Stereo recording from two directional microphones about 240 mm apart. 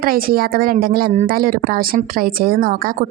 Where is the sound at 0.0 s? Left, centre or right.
Right.